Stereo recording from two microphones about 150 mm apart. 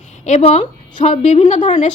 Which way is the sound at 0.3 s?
50° left (ahead or behind).